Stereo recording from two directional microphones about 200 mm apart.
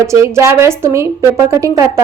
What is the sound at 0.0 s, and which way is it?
A woman's voice, 15° right (ahead or behind).